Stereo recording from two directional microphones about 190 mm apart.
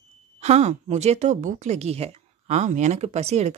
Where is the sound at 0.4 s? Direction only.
35° right (ahead or behind).